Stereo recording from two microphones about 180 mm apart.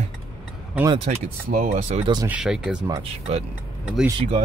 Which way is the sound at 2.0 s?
25° right (ahead or behind).